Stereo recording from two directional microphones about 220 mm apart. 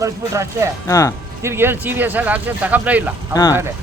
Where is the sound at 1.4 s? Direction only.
10° right (ahead or behind).